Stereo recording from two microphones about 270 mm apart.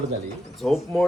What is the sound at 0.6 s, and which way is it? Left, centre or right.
Speech, centre.